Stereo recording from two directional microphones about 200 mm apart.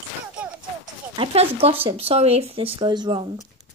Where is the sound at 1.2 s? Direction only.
30° right (ahead or behind).